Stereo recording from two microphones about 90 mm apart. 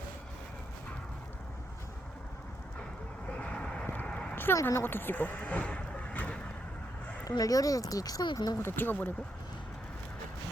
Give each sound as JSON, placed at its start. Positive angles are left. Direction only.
{"t": 3.3, "sound": "vehicle", "side_deg": 10}
{"t": 4.0, "sound": "a sound", "side_deg": 10}
{"t": 4.6, "sound": "speech", "side_deg": 25}
{"t": 7.3, "sound": "speech", "side_deg": 40}
{"t": 8.5, "sound": "speech", "side_deg": 25}